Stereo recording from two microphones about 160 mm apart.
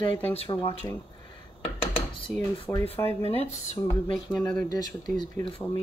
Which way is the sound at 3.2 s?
40° left (ahead or behind).